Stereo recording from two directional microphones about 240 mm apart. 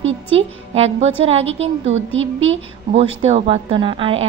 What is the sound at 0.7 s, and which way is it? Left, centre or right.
A woman's voice, right.